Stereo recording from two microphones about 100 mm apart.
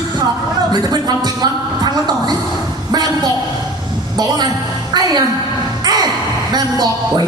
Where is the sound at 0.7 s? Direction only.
45° right (ahead or behind).